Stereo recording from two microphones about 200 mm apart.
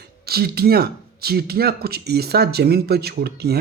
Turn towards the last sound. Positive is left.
turn(degrees=-55)  # may be behind; listen again after turning